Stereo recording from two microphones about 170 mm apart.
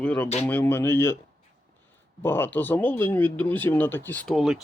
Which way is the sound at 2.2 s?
10° left (ahead or behind).